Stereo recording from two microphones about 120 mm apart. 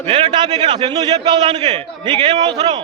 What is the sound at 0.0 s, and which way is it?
A man's voice, 45° right (ahead or behind).